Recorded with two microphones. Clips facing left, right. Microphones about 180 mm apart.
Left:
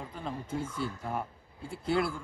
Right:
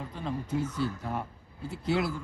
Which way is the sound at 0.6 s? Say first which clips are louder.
Right 4 dB; 25° left (ahead or behind).